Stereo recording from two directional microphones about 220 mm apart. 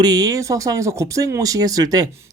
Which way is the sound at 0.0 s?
15° right (ahead or behind).